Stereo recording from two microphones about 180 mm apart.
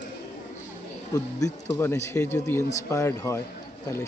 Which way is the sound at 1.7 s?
15° left (ahead or behind).